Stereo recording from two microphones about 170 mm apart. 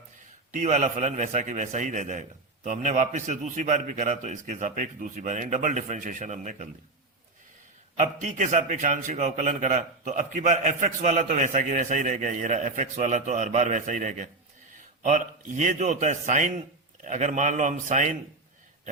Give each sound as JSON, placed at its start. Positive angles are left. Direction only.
{"t": 0.5, "sound": "a man's voice", "side_deg": -45}
{"t": 7.9, "sound": "a man's voice", "side_deg": -45}